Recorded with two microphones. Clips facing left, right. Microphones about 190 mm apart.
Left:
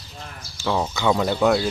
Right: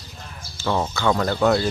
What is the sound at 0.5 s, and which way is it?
Speech, 5° left (ahead or behind).